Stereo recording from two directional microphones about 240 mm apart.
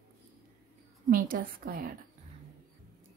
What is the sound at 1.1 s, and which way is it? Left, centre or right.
Speech, right.